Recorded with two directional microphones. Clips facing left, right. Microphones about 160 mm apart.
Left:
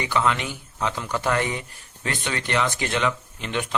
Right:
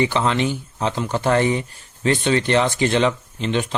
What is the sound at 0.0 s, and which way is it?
Speech, 30° right (ahead or behind).